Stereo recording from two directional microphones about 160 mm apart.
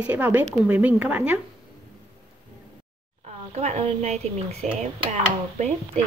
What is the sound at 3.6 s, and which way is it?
Speech, 45° right (ahead or behind).